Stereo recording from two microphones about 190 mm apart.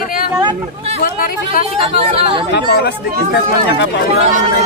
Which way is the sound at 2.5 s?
60° left (ahead or behind).